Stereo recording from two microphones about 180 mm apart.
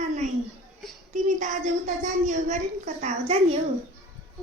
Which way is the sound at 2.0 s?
45° right (ahead or behind).